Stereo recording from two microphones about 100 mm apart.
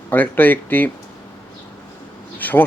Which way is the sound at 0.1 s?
20° left (ahead or behind).